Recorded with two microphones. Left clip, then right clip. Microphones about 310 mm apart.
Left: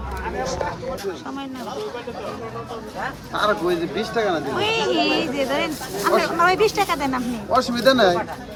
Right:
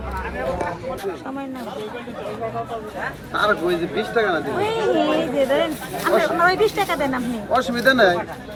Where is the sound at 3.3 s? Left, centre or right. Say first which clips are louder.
Right 1 dB; left.